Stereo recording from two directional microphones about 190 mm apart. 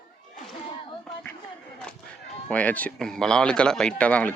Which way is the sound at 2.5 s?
5° left (ahead or behind).